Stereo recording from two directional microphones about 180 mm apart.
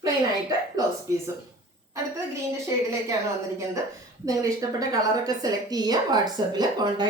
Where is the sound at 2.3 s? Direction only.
15° right (ahead or behind).